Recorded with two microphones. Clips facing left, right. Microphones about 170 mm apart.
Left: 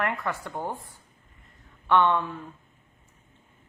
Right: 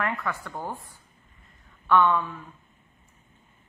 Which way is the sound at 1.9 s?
25° left (ahead or behind).